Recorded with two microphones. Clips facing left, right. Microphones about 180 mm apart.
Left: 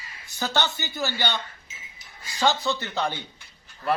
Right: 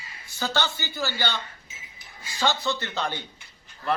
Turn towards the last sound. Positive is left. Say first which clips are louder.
# left 2 dB
turn(degrees=15)  # may be behind; listen again after turning